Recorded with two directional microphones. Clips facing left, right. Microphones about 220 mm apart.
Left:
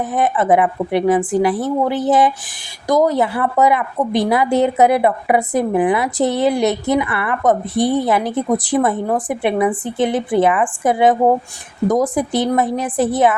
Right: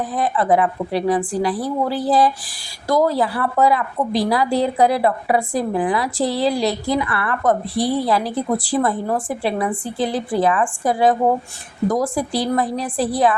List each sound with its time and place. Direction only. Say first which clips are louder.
0.1 s a woman's voice: left 3 dB; 20° left (ahead or behind)